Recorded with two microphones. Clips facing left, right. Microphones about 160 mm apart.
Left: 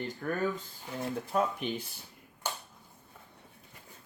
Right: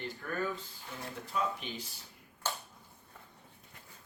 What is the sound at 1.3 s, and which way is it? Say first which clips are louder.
Speech: left 4 dB; 50° left (ahead or behind).